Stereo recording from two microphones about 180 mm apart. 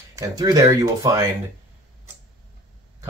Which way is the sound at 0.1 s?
20° right (ahead or behind).